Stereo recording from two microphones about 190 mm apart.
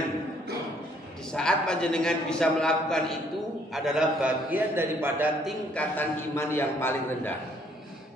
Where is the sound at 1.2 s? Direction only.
5° left (ahead or behind); by 5.2 s 10° right (ahead or behind).